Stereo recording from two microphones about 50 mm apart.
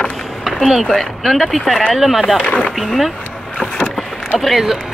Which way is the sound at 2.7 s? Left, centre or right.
Centre.